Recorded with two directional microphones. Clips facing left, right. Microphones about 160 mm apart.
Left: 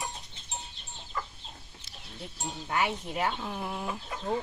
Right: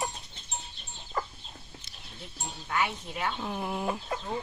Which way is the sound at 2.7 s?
35° left (ahead or behind).